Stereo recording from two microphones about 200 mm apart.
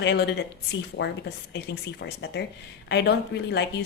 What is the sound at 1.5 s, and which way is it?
A woman's voice, 55° left (ahead or behind).